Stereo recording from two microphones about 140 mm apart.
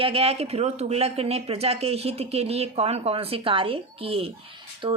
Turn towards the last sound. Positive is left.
turn(degrees=-35)  # may be behind; listen again after turning